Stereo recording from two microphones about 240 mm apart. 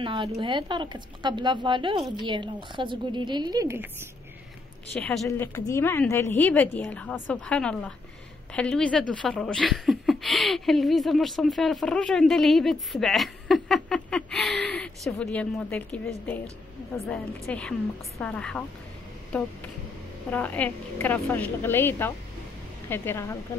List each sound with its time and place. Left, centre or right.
0.0 s speech: centre
4.9 s a woman's voice: centre